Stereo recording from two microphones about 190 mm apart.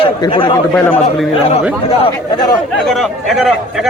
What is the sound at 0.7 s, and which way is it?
Speech, 10° left (ahead or behind).